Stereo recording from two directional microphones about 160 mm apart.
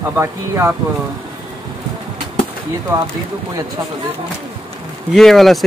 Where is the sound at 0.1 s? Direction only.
15° right (ahead or behind).